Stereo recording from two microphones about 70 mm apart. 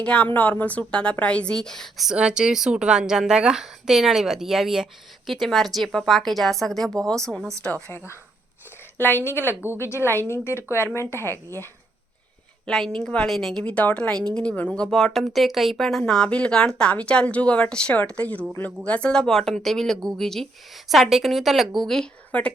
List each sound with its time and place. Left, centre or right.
0.0 s speech: centre
2.0 s a woman's voice: centre
9.0 s speech: left
9.5 s speech: right
9.7 s speech: left
12.7 s a woman's voice: centre
13.0 s speech: centre
13.3 s a woman's voice: centre
13.6 s a woman's voice: centre
22.3 s speech: centre